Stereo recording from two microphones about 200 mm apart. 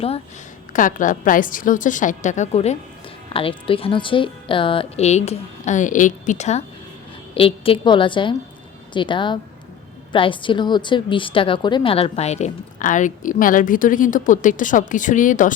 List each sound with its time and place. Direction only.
0.7 s a woman's voice: 40° left (ahead or behind)